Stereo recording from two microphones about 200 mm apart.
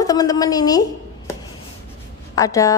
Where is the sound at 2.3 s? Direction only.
15° left (ahead or behind).